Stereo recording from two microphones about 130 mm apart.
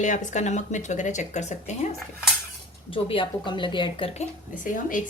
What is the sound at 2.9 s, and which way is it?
A woman's voice, 40° left (ahead or behind).